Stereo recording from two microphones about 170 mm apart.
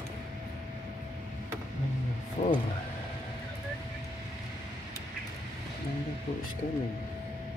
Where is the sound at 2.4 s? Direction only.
55° left (ahead or behind).